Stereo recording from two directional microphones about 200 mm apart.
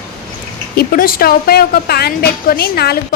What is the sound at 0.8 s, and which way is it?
A woman's voice, 45° left (ahead or behind).